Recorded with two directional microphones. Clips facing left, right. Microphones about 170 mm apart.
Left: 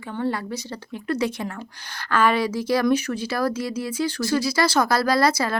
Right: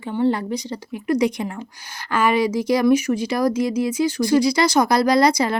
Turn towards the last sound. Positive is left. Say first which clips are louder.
# right 4 dB
turn(degrees=-15)  # may be behind; listen again after turning